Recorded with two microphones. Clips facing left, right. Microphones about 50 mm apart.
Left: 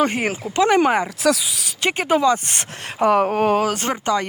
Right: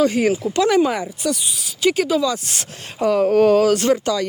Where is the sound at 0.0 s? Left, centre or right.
Left.